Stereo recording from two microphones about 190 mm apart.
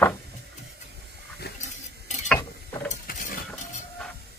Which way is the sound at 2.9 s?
45° left (ahead or behind).